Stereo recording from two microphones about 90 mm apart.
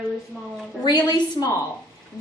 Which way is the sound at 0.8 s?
55° left (ahead or behind).